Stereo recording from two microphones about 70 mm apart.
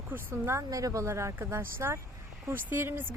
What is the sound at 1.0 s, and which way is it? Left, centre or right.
Speech, right.